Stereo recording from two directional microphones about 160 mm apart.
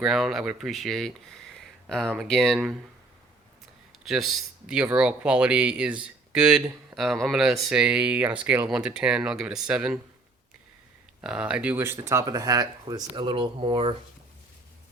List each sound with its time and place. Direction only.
0.0 s speech: centre (ahead or behind)
4.0 s speech: centre (ahead or behind)
11.2 s speech: 5° right (ahead or behind); by 13.9 s 35° right (ahead or behind)